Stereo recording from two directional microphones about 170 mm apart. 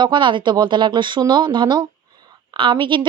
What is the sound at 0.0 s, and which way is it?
Speech, 25° right (ahead or behind).